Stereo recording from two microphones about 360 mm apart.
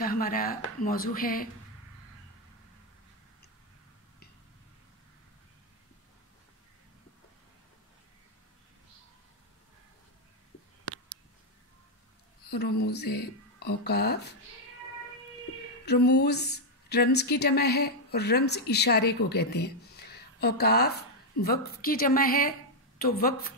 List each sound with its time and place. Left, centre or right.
0.0 s speech: left
12.4 s speech: left
15.8 s speech: left